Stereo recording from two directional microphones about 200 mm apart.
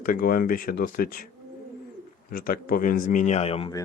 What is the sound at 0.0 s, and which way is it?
Speech, 45° left (ahead or behind).